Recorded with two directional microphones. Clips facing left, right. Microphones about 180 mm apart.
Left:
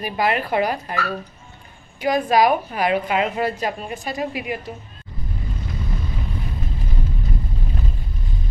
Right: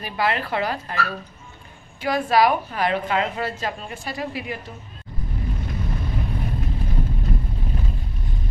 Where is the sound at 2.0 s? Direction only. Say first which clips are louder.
Left 2 dB; 15° left (ahead or behind).